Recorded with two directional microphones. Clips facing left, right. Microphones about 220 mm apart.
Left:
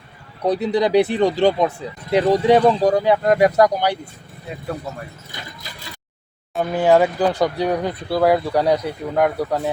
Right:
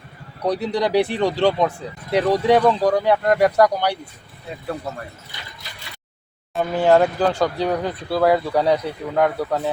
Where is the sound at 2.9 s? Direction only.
15° left (ahead or behind).